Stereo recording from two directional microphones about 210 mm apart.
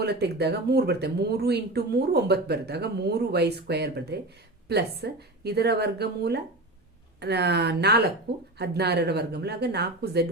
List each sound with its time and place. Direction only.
0.0 s speech: 50° right (ahead or behind)